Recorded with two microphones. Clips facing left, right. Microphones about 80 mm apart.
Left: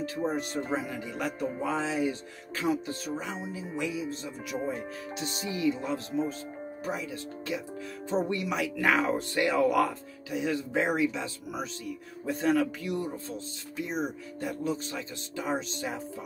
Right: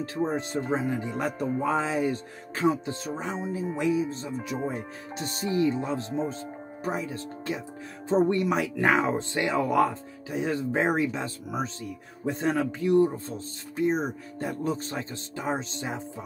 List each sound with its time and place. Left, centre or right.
0.0 s speech: right
10.3 s speech: right